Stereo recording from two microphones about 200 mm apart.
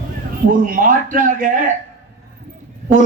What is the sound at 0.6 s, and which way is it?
Speech, 45° right (ahead or behind).